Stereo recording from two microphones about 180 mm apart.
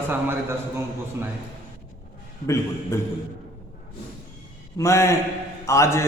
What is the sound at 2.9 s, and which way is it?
Speech, 15° left (ahead or behind).